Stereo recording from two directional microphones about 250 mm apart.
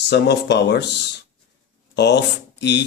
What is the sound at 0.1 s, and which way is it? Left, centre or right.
A man's voice, left.